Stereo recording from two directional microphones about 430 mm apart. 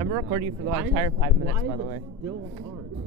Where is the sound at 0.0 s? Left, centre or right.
Centre.